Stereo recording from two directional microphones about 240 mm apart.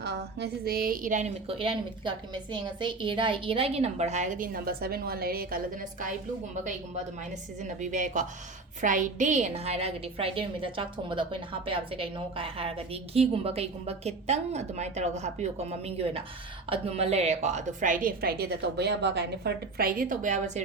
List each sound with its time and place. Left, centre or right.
0.0 s a woman's voice: right
7.6 s a woman's voice: right